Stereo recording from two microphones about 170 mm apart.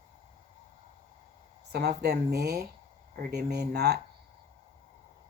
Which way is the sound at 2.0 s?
70° right (ahead or behind).